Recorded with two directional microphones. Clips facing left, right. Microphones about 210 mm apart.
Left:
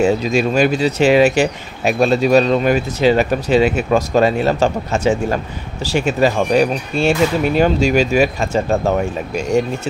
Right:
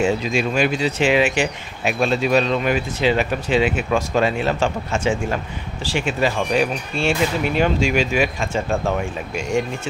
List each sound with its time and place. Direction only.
0.0 s speech: 40° left (ahead or behind)